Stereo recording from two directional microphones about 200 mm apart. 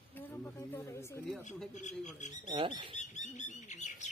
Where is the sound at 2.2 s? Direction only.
35° left (ahead or behind).